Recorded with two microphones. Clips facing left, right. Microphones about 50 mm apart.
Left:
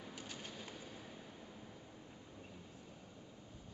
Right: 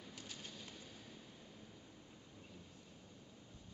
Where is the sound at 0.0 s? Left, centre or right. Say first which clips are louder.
Left 3 dB; centre.